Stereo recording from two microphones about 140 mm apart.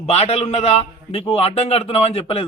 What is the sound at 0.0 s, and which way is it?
Speech, 50° left (ahead or behind).